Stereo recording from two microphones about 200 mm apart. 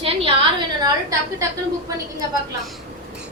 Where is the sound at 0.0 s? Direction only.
25° right (ahead or behind).